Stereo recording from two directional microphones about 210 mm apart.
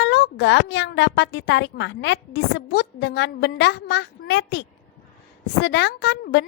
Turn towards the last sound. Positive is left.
turn(degrees=55)  # may be behind; listen again after turning